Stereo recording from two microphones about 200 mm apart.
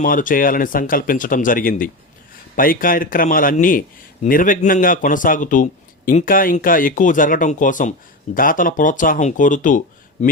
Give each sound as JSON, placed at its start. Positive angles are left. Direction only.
{"t": 0.0, "sound": "a man's voice", "side_deg": 45}